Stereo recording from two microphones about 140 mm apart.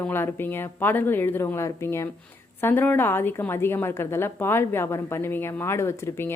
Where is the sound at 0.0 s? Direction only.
15° left (ahead or behind).